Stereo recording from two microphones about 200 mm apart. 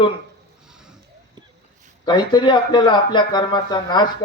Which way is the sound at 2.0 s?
20° left (ahead or behind).